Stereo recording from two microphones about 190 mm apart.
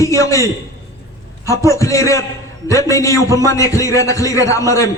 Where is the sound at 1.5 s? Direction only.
15° left (ahead or behind).